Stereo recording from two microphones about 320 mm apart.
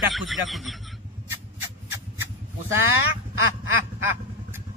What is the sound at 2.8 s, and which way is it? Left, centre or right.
Speech, right.